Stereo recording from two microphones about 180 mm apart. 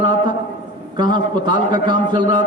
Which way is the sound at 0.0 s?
45° left (ahead or behind).